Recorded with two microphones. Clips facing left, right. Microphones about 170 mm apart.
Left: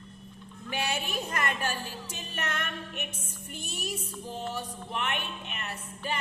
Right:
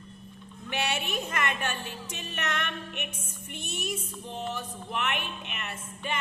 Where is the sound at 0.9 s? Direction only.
35° left (ahead or behind).